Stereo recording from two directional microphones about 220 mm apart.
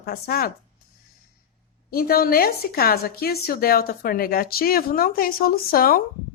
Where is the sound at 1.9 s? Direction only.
45° left (ahead or behind).